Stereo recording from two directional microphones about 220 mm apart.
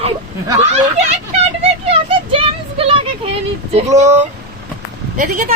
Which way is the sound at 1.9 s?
25° right (ahead or behind).